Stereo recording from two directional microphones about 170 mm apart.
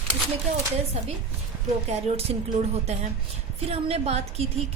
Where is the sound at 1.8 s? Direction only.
40° right (ahead or behind).